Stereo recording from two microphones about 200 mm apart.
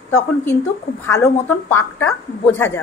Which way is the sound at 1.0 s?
15° left (ahead or behind).